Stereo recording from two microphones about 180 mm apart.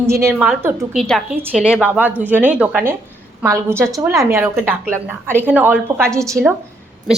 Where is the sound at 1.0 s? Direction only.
Centre (ahead or behind); by 6.3 s 15° right (ahead or behind).